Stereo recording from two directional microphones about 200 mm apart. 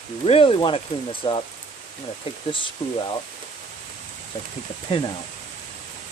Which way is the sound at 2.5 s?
25° left (ahead or behind).